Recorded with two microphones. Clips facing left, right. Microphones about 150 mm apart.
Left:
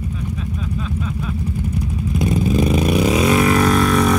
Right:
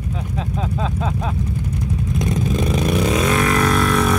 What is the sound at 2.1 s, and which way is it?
Vehicle, 5° left (ahead or behind).